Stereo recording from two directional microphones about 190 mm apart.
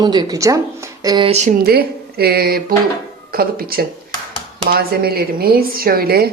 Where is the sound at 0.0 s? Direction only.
20° right (ahead or behind).